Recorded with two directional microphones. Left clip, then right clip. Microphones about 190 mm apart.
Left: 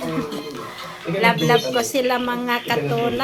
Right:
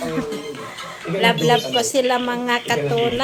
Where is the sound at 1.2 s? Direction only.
20° right (ahead or behind).